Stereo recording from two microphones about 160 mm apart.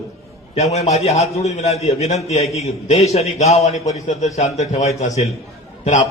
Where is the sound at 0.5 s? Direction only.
40° left (ahead or behind).